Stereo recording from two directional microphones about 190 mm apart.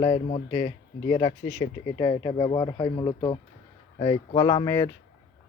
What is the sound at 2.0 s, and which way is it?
Speech, 30° left (ahead or behind).